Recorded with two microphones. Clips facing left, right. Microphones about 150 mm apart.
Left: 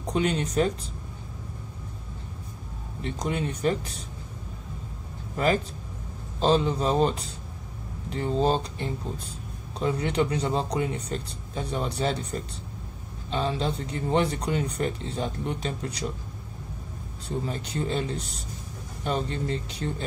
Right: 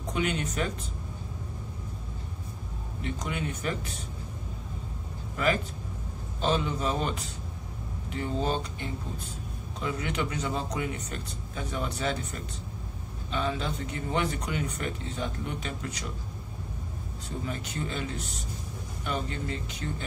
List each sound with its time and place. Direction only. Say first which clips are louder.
0.0 s speech: left 4 dB; 35° left (ahead or behind)
3.0 s speech: left 4 dB; 35° left (ahead or behind)
5.3 s a man's voice: left 3 dB; 35° left (ahead or behind)
17.5 s speech: left 3 dB; 35° left (ahead or behind)